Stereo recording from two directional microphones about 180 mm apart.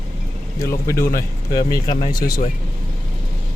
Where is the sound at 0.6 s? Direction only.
15° left (ahead or behind).